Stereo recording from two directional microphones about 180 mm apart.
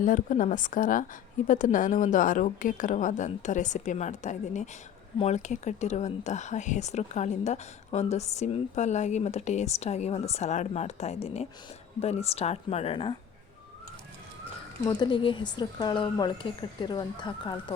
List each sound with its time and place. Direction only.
0.0 s a woman's voice: 45° left (ahead or behind); by 13.1 s 30° left (ahead or behind)
14.8 s speech: 25° left (ahead or behind)